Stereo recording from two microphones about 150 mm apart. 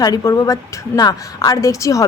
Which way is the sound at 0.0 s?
25° left (ahead or behind).